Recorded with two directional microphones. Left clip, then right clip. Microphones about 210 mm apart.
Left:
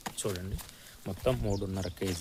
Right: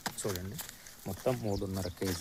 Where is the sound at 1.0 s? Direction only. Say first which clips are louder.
Left 2 dB; 15° left (ahead or behind).